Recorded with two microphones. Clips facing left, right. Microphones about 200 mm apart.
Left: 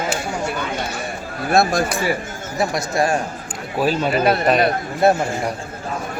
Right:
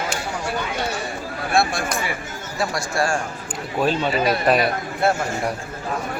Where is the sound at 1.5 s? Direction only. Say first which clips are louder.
Left 5 dB; 40° left (ahead or behind).